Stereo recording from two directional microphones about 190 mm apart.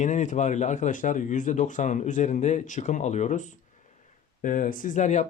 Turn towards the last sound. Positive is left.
turn(degrees=40)  # may be behind; listen again after turning